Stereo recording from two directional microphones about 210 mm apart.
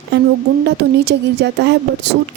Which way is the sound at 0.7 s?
55° right (ahead or behind).